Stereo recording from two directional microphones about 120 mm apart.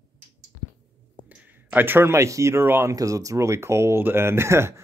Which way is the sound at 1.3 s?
10° right (ahead or behind).